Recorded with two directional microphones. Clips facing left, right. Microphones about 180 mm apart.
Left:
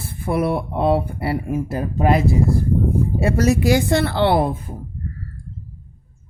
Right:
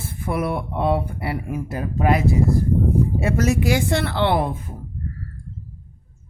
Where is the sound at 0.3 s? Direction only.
30° left (ahead or behind).